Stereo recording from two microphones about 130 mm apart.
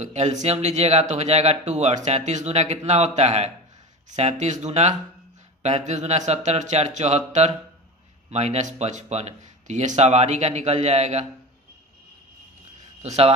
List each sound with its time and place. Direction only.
0.0 s speech: 65° right (ahead or behind)
13.0 s speech: 55° right (ahead or behind)